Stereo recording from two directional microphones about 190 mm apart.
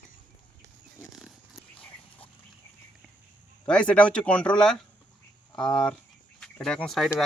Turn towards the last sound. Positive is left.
turn(degrees=0)  # may be behind; listen again after turning